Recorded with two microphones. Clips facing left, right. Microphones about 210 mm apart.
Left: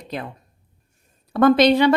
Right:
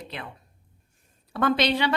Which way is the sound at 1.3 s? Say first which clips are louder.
Left 9 dB; 45° left (ahead or behind).